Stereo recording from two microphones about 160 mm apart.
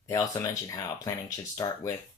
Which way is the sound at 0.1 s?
20° left (ahead or behind).